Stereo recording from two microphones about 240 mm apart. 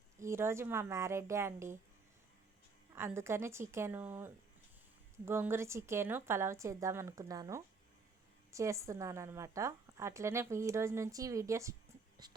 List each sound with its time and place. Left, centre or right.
0.2 s a woman's voice: centre
2.9 s a woman's voice: centre